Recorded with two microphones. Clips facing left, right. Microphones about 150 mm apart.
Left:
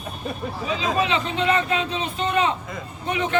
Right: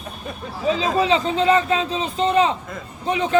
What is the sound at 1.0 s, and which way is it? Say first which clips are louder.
A man's voice: right 5 dB; 35° right (ahead or behind).